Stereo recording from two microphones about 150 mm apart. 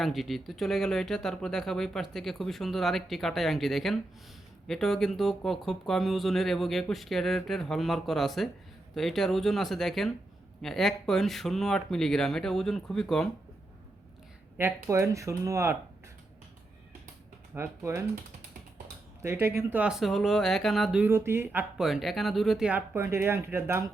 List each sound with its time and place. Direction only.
0.0 s speech: centre (ahead or behind)
14.6 s speech: 20° right (ahead or behind)
17.5 s speech: 15° right (ahead or behind)
19.2 s speech: 15° right (ahead or behind); by 21.0 s centre (ahead or behind)
21.0 s speech: 15° right (ahead or behind)